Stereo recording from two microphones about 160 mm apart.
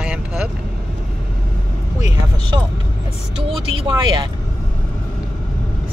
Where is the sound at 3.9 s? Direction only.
30° right (ahead or behind).